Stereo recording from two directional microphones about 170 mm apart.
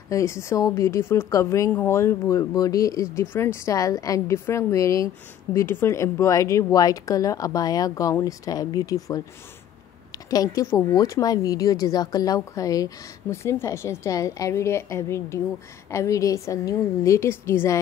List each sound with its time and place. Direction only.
0.1 s a woman's voice: 15° left (ahead or behind)